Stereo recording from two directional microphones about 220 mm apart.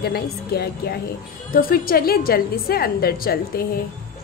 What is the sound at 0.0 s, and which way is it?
A woman's voice, 45° left (ahead or behind).